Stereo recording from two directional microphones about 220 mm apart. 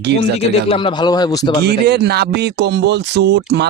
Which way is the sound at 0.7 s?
20° left (ahead or behind).